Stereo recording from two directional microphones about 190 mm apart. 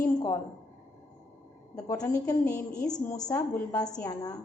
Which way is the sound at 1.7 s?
20° left (ahead or behind).